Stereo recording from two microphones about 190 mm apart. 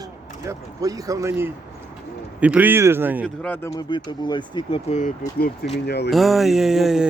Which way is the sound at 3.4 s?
10° left (ahead or behind).